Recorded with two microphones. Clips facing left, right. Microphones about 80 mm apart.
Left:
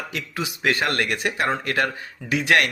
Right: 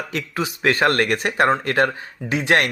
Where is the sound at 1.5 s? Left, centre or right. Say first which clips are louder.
Right 5 dB; right.